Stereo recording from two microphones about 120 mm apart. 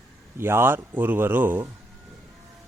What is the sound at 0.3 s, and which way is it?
Speech, 20° right (ahead or behind).